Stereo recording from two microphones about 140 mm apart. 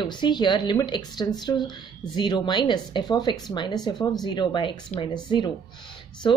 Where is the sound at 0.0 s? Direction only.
30° left (ahead or behind).